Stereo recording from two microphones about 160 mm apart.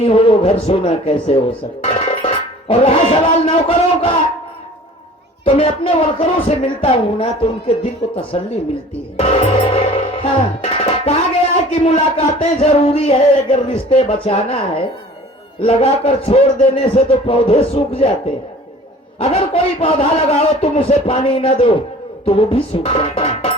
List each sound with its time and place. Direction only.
0.0 s speech: 35° left (ahead or behind)
5.5 s a man's voice: 35° left (ahead or behind)
9.1 s music: 35° left (ahead or behind)
15.5 s a man's voice: 35° left (ahead or behind)
19.2 s a man's voice: 35° left (ahead or behind)